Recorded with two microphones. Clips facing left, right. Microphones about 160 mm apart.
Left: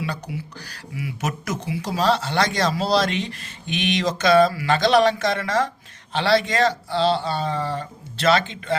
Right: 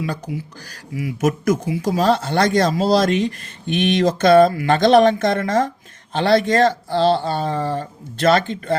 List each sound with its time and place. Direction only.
0.9 s speech: 40° right (ahead or behind)